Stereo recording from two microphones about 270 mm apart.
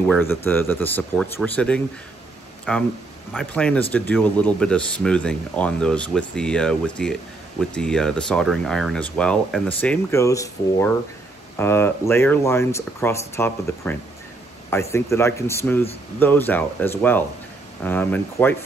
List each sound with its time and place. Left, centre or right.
0.1 s speech: centre